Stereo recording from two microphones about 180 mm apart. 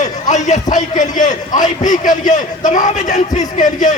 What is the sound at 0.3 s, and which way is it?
A man's voice, 40° left (ahead or behind).